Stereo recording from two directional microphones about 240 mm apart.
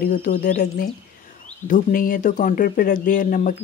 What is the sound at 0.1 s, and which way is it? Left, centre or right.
Speech, left.